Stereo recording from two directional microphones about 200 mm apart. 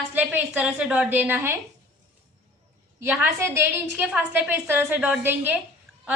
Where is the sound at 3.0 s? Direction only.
10° right (ahead or behind).